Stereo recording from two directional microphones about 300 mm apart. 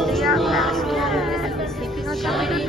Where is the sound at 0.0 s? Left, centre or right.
Centre.